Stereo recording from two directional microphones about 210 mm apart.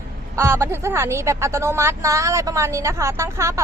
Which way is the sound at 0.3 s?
10° right (ahead or behind).